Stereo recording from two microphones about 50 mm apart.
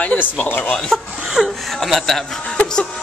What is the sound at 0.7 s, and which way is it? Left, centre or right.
Speech, centre.